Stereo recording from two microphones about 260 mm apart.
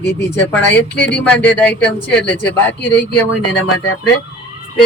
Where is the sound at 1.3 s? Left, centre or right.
Centre.